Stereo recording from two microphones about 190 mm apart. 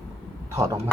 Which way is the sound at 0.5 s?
15° right (ahead or behind).